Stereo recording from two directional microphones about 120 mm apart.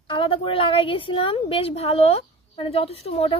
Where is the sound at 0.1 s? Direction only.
45° left (ahead or behind).